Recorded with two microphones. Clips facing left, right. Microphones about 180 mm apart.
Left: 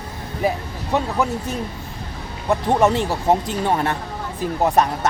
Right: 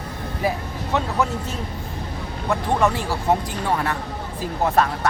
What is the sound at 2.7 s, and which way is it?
Speech, 20° left (ahead or behind).